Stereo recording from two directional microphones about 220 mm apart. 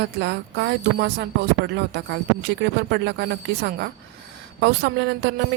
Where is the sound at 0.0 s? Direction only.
50° right (ahead or behind).